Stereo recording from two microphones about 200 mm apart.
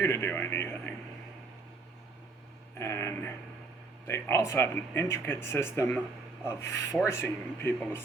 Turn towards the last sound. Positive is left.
turn(degrees=10)  # may be behind; listen again after turning